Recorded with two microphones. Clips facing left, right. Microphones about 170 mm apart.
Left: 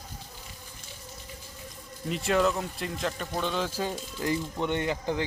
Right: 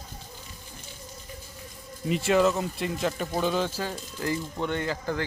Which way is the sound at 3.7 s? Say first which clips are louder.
Left 1 dB; 15° left (ahead or behind).